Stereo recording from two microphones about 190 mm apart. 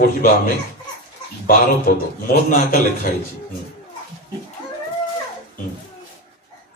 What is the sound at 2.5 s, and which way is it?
Speech, 50° left (ahead or behind).